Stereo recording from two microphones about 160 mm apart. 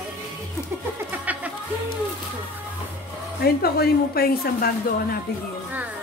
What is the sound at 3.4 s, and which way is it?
A woman's voice, 75° left (ahead or behind).